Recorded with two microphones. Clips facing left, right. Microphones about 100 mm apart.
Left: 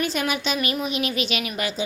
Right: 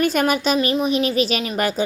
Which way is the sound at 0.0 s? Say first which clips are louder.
Right 7 dB; 50° right (ahead or behind).